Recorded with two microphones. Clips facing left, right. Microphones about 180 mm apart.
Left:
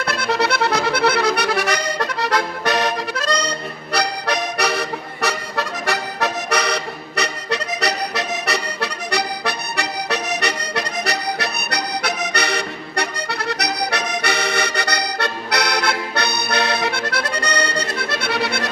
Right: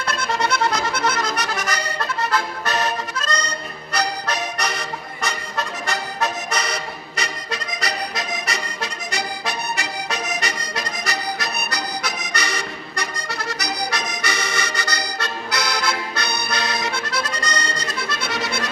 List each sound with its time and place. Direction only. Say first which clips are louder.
0.0 s accordion: left 3 dB; 65° left (ahead or behind)
3.9 s music: left 3 dB; 70° left (ahead or behind)